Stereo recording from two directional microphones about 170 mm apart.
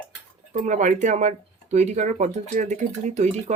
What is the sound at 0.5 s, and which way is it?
Speech, 45° right (ahead or behind).